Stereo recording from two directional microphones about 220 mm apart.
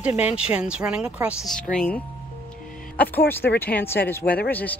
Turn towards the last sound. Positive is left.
turn(degrees=45)  # may be behind; listen again after turning